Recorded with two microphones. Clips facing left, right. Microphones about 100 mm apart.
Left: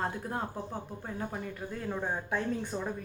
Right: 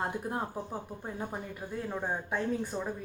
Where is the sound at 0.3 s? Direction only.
15° right (ahead or behind).